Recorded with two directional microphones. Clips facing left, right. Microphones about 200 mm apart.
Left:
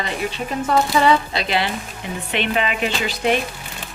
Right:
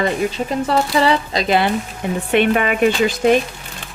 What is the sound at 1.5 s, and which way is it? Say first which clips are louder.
Speech: right 7 dB; 50° right (ahead or behind).